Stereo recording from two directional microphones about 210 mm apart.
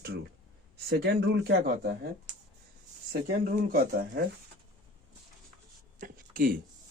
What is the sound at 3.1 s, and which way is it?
Speech, 45° right (ahead or behind).